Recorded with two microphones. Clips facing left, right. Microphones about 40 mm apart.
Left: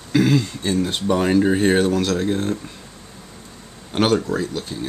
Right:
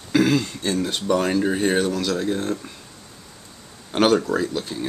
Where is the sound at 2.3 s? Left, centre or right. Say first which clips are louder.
Left 2 dB; centre.